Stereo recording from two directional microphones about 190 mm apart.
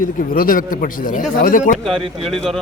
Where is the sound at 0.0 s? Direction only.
45° left (ahead or behind).